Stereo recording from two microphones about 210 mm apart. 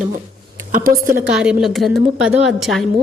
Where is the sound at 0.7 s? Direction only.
40° right (ahead or behind).